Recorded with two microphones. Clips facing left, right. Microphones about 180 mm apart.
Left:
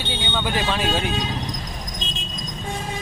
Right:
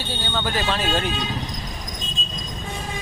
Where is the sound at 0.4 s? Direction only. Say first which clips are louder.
Left 1 dB; 10° left (ahead or behind).